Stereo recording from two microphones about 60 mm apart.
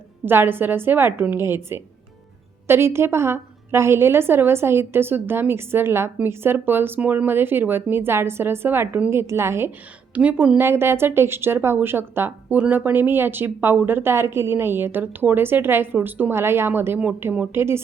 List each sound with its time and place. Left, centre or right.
0.3 s a woman's voice: right
7.0 s speech: right
7.3 s a woman's voice: right
10.2 s speech: right
10.6 s speech: right
12.5 s speech: right
16.3 s speech: right